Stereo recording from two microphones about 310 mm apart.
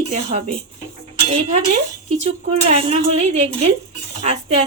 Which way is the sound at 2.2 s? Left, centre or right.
Centre.